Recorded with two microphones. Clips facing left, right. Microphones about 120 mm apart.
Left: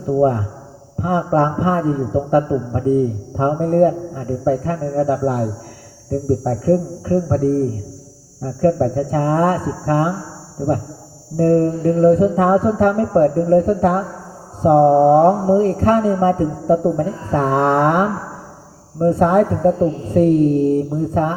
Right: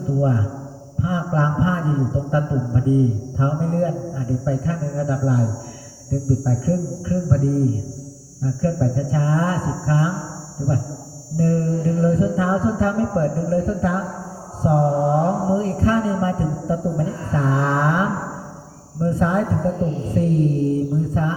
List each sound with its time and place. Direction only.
0.2 s a man's voice: 50° left (ahead or behind)